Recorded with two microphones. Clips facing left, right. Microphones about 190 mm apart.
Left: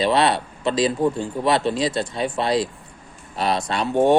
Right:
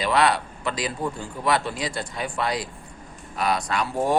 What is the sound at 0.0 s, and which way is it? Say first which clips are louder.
Speech: left 3 dB; 25° left (ahead or behind).